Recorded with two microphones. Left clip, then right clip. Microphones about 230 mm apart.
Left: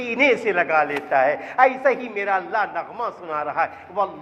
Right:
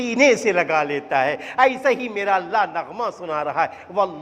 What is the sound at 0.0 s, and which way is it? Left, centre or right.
A man's voice, right.